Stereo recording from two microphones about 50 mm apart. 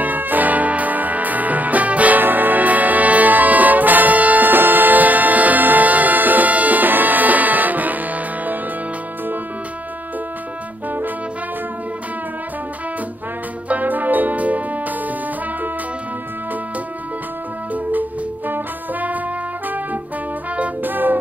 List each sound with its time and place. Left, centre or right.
0.0 s music: right
13.7 s music: right
18.5 s music: right
20.8 s music: right